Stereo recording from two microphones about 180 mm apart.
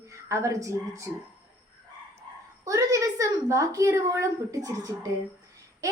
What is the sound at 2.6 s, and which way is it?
A woman's voice, 20° right (ahead or behind).